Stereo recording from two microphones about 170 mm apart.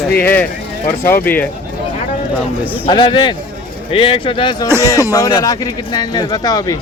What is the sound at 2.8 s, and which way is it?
Speech, 30° left (ahead or behind).